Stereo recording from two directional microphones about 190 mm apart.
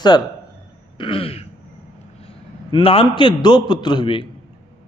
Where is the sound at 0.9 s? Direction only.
30° left (ahead or behind).